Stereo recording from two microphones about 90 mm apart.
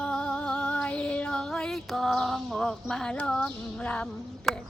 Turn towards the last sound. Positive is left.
turn(degrees=0)  # may be behind; listen again after turning